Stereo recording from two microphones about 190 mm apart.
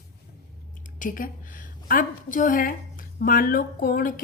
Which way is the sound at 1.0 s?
45° left (ahead or behind).